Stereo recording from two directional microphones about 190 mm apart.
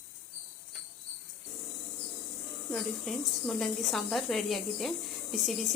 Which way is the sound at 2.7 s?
Centre (ahead or behind).